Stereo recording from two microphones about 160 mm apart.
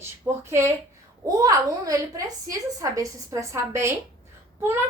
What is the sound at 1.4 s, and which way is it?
A woman's voice, 20° right (ahead or behind).